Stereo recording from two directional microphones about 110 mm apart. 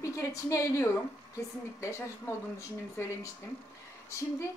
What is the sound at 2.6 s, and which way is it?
A woman's voice, 30° left (ahead or behind).